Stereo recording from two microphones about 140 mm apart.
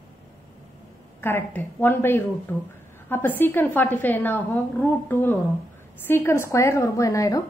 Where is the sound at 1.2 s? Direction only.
15° left (ahead or behind).